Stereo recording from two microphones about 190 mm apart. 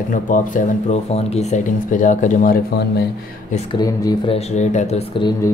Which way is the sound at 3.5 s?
20° left (ahead or behind).